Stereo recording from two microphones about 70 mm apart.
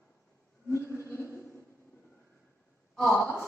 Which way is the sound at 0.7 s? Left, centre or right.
Right.